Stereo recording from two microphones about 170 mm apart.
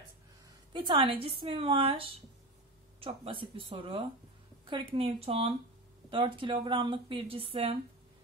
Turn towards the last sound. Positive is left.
turn(degrees=-35)  # may be behind; listen again after turning